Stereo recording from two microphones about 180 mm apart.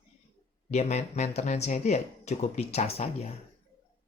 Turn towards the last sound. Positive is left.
turn(degrees=35)  # may be behind; listen again after turning